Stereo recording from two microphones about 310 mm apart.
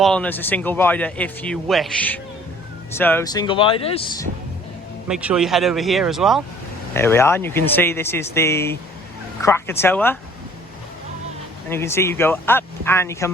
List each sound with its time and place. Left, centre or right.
0.0 s speech: centre
5.0 s speech: centre
11.7 s speech: centre